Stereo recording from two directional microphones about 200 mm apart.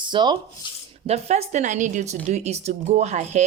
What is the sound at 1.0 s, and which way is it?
Speech, 35° right (ahead or behind).